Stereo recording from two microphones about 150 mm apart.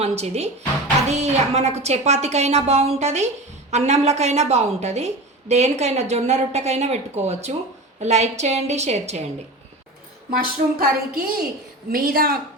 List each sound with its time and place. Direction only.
0.0 s a woman's voice: 45° right (ahead or behind)
10.3 s a woman's voice: 80° right